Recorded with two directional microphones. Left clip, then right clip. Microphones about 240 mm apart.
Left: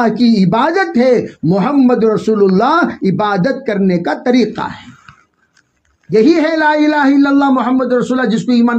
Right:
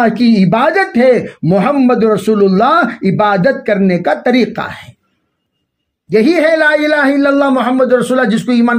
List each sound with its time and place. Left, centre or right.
0.0 s speech: right
6.1 s speech: right